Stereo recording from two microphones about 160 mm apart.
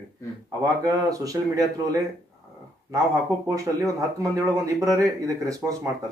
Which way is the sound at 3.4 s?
20° right (ahead or behind).